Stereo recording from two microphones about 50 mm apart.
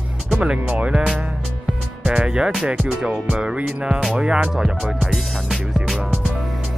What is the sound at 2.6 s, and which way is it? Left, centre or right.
Music, right.